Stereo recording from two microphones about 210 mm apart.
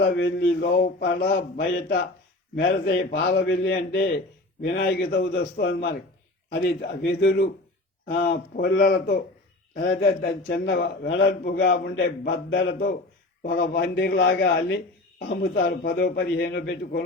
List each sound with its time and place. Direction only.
0.0 s a man's voice: 55° left (ahead or behind)